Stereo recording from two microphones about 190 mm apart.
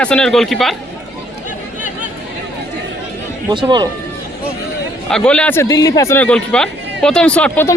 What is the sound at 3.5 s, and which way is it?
Speech, 25° right (ahead or behind).